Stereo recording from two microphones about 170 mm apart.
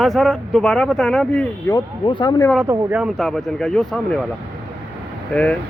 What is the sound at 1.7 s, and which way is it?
Speech, 25° left (ahead or behind).